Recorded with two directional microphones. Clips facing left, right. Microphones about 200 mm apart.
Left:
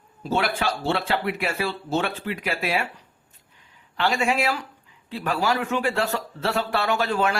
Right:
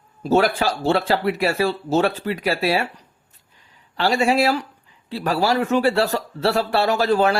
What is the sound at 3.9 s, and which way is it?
Speech, 35° right (ahead or behind).